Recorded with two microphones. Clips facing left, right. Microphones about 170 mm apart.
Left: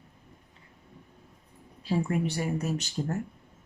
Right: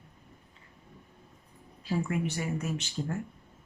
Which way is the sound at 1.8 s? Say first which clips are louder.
Left 3 dB; 30° left (ahead or behind).